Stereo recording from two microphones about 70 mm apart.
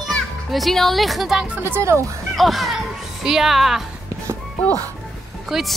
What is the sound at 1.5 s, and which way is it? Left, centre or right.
Speech, right.